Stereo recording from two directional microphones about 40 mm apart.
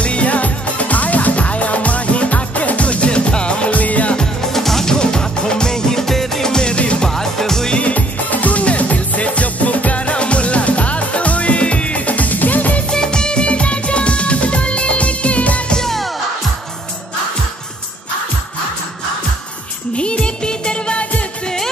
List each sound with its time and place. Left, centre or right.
0.0 s music: left
4.2 s music: centre
4.9 s music: centre
6.5 s music: left
7.1 s music: centre
7.7 s music: left
12.9 s music: centre; by 15.6 s left
15.7 s music: centre
20.0 s music: left